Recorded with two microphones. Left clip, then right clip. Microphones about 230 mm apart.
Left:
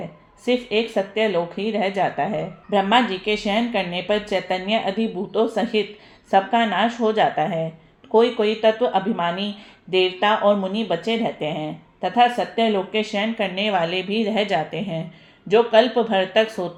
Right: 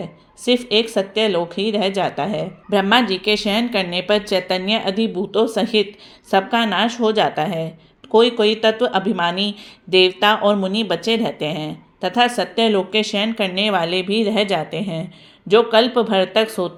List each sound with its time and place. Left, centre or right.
0.4 s speech: right
9.2 s speech: right
9.9 s speech: right